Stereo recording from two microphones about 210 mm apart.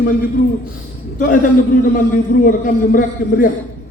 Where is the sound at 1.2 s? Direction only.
40° left (ahead or behind).